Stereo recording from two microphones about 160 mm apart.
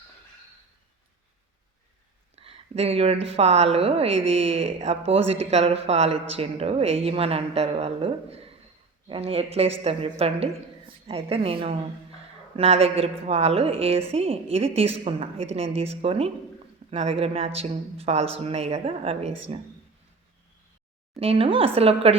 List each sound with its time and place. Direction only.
2.3 s a woman's voice: 40° right (ahead or behind)
21.2 s a woman's voice: 35° right (ahead or behind)